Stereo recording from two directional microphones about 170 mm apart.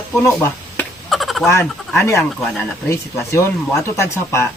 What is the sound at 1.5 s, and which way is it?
Speech, 15° left (ahead or behind).